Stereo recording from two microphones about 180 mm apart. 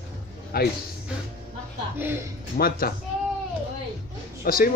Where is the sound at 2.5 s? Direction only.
55° left (ahead or behind).